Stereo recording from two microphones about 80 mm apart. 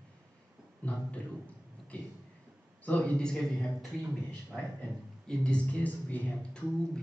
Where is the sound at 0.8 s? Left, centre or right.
Centre.